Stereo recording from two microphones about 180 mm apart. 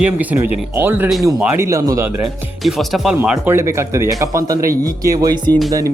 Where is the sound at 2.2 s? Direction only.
Centre (ahead or behind).